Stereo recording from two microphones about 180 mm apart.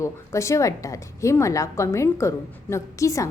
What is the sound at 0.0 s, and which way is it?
A woman's voice, 15° left (ahead or behind).